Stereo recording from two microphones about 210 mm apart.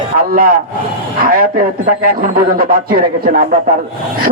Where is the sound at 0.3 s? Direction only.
45° right (ahead or behind).